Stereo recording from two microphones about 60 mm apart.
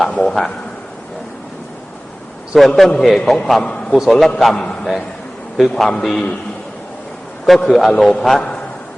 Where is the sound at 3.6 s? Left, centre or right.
Centre.